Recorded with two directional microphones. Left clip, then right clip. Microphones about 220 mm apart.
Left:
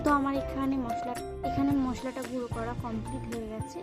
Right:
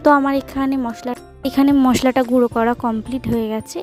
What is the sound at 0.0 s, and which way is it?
Speech, 45° right (ahead or behind).